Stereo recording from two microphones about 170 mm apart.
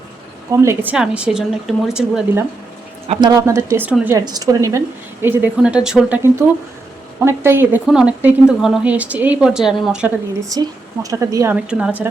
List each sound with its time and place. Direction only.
0.5 s a woman's voice: 15° right (ahead or behind)
3.1 s a woman's voice: 25° right (ahead or behind)
5.2 s speech: 10° right (ahead or behind)
7.3 s a woman's voice: 15° right (ahead or behind)
10.4 s a woman's voice: 20° right (ahead or behind)
11.5 s speech: 5° right (ahead or behind)